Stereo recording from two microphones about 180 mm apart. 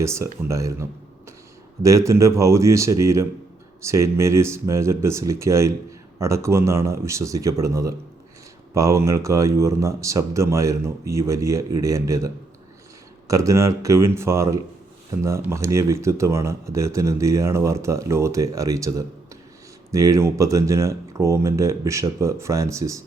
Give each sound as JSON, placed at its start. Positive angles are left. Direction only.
{"t": 0.0, "sound": "speech", "side_deg": -15}